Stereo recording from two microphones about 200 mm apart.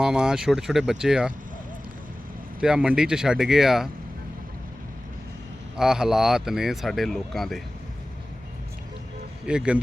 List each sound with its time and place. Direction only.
0.0 s speech: 5° right (ahead or behind)
2.6 s speech: 5° right (ahead or behind)
5.7 s speech: 5° right (ahead or behind)
9.5 s speech: 5° right (ahead or behind)